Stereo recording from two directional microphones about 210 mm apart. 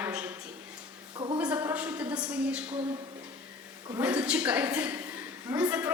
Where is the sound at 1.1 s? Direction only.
25° right (ahead or behind).